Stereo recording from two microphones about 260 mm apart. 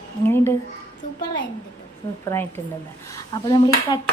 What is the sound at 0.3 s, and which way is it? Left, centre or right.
Speech, centre.